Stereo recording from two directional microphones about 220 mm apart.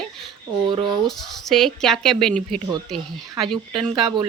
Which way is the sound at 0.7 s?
20° right (ahead or behind).